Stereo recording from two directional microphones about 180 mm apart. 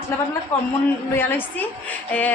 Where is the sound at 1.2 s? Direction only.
10° left (ahead or behind).